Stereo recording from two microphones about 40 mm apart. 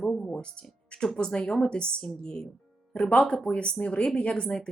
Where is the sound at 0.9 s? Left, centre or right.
Left.